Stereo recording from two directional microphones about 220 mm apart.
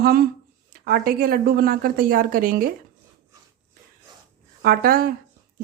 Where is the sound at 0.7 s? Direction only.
45° right (ahead or behind).